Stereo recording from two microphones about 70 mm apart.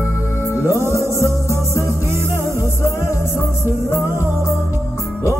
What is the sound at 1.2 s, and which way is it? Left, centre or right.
Music, left.